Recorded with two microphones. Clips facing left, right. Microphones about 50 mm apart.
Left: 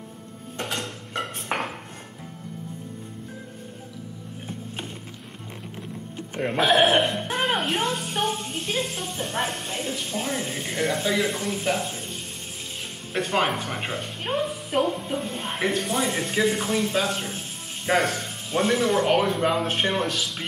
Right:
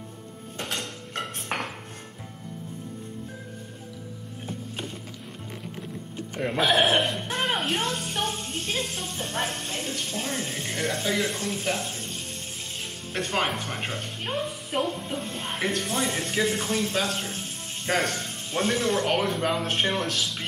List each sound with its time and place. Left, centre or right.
0.6 s cutlery: centre
6.3 s speech: left
6.6 s speech: centre